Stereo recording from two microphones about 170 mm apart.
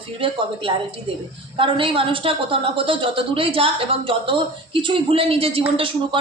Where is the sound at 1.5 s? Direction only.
30° right (ahead or behind).